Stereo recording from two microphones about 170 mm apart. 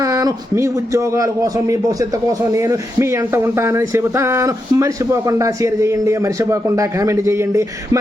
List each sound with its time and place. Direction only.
0.0 s a man's voice: 20° right (ahead or behind)